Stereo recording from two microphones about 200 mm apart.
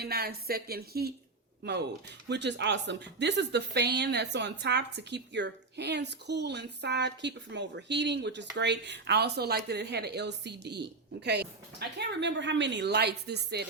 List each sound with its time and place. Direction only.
0.0 s speech: 50° right (ahead or behind)
2.3 s speech: 60° right (ahead or behind)